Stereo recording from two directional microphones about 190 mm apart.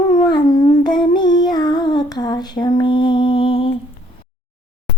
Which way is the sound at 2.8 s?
25° left (ahead or behind).